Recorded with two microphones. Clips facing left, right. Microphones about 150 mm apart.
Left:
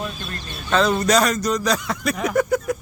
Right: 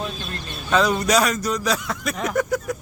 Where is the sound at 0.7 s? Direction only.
10° right (ahead or behind).